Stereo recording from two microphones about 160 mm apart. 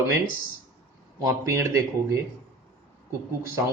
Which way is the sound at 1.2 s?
15° right (ahead or behind).